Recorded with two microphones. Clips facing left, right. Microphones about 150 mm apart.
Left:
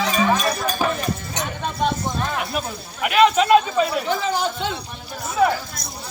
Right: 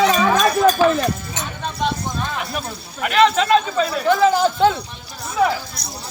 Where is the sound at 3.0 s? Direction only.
10° left (ahead or behind).